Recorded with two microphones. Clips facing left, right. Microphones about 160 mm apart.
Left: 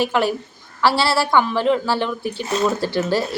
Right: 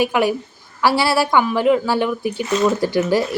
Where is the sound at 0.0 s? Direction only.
15° right (ahead or behind).